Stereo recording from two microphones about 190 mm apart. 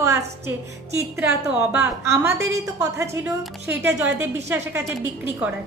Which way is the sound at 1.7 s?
15° right (ahead or behind).